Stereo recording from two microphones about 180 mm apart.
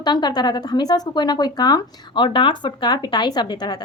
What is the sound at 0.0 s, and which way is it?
A woman's voice, 25° left (ahead or behind).